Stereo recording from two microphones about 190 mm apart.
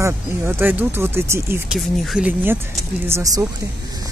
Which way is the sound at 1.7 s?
Centre (ahead or behind).